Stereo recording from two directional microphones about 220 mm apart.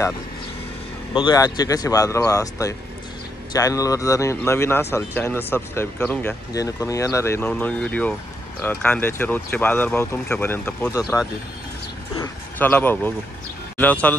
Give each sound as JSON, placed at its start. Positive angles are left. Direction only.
{"t": 1.1, "sound": "speech", "side_deg": 20}
{"t": 12.2, "sound": "speech", "side_deg": 10}